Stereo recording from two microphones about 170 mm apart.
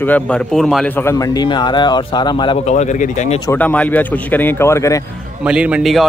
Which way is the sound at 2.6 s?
45° left (ahead or behind).